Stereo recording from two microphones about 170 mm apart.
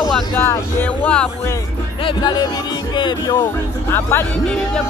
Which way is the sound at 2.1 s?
25° left (ahead or behind).